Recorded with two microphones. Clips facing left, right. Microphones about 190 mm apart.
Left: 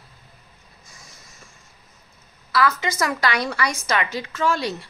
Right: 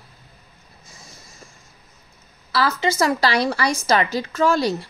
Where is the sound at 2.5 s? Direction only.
30° right (ahead or behind).